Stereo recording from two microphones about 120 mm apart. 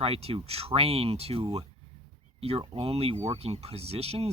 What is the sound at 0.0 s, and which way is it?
Speech, 55° right (ahead or behind).